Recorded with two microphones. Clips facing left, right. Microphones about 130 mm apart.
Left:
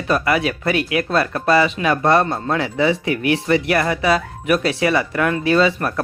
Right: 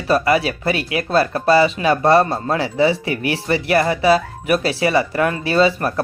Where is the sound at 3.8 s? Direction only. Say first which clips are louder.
Right 3 dB; 30° right (ahead or behind).